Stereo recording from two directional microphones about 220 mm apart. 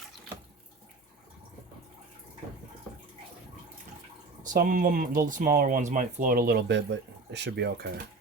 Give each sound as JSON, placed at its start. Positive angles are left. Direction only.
{"t": 4.5, "sound": "speech", "side_deg": -40}